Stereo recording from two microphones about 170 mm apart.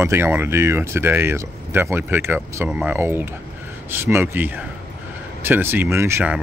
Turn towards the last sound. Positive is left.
turn(degrees=-10)  # may be behind; listen again after turning